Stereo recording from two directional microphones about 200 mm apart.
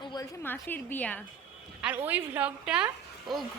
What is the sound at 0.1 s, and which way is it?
A woman's voice, 15° left (ahead or behind).